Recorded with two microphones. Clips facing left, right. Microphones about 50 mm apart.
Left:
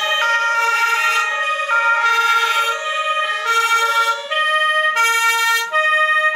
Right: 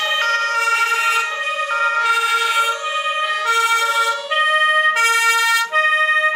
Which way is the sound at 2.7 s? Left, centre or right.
Left.